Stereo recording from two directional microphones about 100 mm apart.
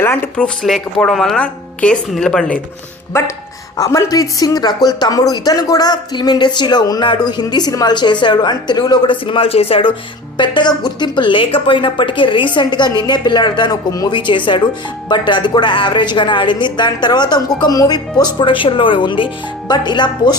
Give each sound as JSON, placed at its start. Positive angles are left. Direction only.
{"t": 0.0, "sound": "a sound", "side_deg": 25}
{"t": 0.3, "sound": "a woman's voice", "side_deg": 5}
{"t": 3.1, "sound": "speech", "side_deg": 30}
{"t": 9.2, "sound": "speech", "side_deg": 65}
{"t": 10.3, "sound": "a woman's voice", "side_deg": 50}
{"t": 14.1, "sound": "a woman's voice", "side_deg": 55}